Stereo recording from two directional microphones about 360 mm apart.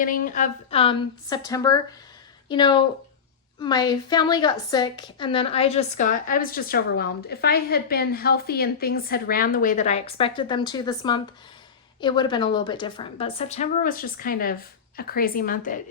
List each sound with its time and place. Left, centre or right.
0.0 s a woman's voice: left